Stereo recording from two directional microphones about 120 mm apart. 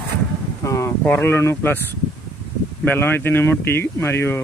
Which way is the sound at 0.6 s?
25° left (ahead or behind).